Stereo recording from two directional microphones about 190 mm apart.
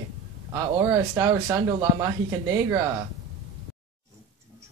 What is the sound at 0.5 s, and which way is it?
Speech, 15° right (ahead or behind).